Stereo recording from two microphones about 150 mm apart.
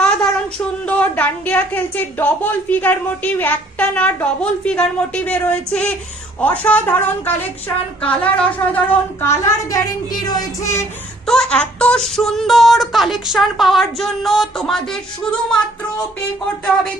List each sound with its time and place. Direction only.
0.9 s a woman's voice: 10° left (ahead or behind)
11.3 s a woman's voice: 5° left (ahead or behind)